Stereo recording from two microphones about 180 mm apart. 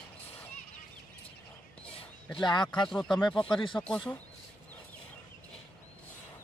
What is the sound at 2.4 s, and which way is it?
Speech, 25° left (ahead or behind).